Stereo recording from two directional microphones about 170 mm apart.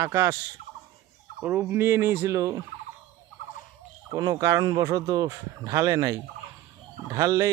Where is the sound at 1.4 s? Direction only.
10° right (ahead or behind).